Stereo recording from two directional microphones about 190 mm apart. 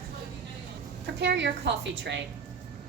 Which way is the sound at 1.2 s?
65° right (ahead or behind).